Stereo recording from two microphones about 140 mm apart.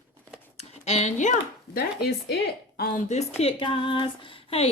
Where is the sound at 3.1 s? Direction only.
50° left (ahead or behind).